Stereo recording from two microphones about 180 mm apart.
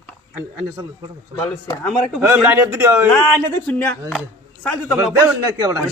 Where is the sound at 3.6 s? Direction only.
10° left (ahead or behind).